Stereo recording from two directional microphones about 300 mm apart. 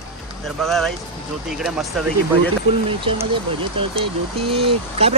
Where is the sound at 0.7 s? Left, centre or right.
Centre.